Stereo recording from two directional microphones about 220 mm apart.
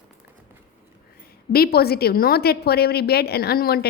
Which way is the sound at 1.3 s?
45° left (ahead or behind).